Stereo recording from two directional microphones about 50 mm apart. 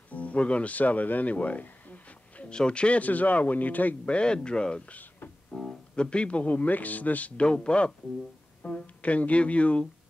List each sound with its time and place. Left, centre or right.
0.1 s music: left
2.5 s speech: centre; by 3.9 s left
4.0 s speech: centre
4.9 s music: left
5.5 s music: centre
6.0 s speech: left
7.4 s speech: centre